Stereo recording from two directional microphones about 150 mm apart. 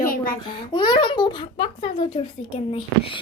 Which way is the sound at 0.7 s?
30° left (ahead or behind).